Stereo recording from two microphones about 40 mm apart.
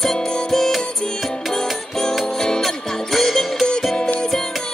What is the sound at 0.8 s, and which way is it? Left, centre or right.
Music, left.